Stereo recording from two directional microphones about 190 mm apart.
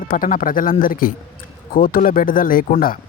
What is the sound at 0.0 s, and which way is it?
A man's voice, 50° left (ahead or behind).